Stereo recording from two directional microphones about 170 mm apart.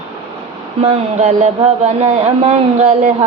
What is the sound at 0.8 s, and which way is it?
Speech, 40° right (ahead or behind).